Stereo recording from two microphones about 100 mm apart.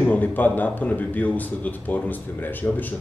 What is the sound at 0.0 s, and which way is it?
Speech, 15° left (ahead or behind).